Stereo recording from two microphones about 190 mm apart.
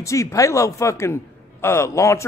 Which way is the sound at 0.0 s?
15° left (ahead or behind).